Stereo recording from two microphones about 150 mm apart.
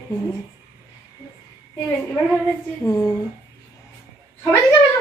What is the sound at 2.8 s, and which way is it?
Speech, 25° left (ahead or behind).